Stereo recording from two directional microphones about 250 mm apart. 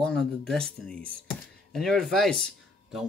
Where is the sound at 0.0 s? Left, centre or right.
Centre.